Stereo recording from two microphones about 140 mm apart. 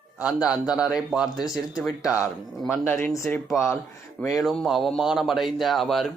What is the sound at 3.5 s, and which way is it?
A man's voice, centre (ahead or behind).